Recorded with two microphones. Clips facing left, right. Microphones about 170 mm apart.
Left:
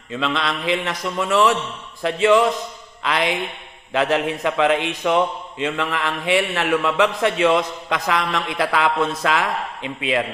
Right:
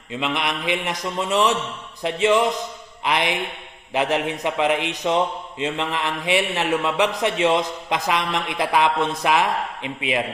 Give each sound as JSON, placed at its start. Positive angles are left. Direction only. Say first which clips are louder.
{"t": 0.1, "sound": "speech", "louder": "left 2 dB", "side_deg": -20}
{"t": 3.0, "sound": "mantra", "louder": "left 1 dB", "side_deg": -20}
{"t": 3.9, "sound": "speech", "louder": "left 2 dB", "side_deg": -20}